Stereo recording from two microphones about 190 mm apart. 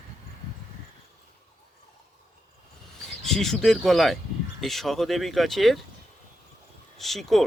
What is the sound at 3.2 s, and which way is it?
Speech, centre (ahead or behind).